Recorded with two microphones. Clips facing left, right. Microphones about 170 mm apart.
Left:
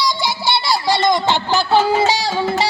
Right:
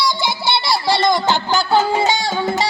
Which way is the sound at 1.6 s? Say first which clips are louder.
Left 2 dB; 35° left (ahead or behind).